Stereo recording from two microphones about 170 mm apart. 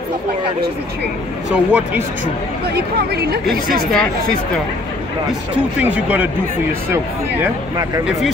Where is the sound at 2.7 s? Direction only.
65° right (ahead or behind).